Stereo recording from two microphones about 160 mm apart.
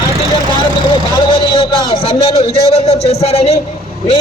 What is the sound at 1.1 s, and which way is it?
A man's voice, 30° left (ahead or behind).